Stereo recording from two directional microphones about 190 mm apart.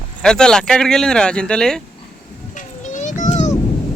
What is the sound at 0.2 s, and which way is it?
Speech, 5° left (ahead or behind).